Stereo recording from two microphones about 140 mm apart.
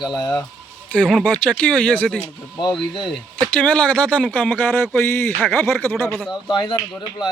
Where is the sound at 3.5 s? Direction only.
10° left (ahead or behind).